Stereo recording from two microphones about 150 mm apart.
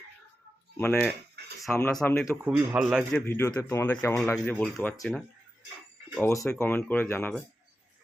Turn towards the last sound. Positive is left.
turn(degrees=15)  # may be behind; listen again after turning